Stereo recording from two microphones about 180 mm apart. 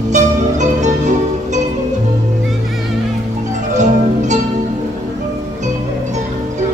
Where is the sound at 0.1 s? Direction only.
40° right (ahead or behind).